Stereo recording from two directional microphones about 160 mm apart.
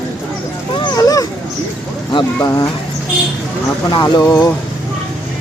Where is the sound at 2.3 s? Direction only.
20° left (ahead or behind).